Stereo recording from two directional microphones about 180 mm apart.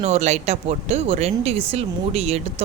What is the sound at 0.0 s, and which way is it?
Speech, 40° right (ahead or behind).